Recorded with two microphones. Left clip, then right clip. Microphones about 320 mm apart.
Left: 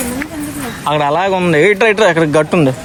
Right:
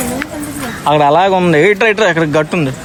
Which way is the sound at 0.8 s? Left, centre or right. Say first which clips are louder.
Right 4 dB; centre.